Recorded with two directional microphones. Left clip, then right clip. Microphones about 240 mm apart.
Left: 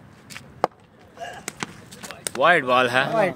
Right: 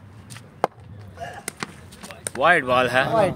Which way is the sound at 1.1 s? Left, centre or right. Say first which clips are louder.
Even; centre.